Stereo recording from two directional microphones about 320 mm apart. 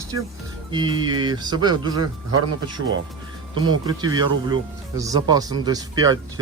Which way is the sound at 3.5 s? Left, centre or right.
Centre.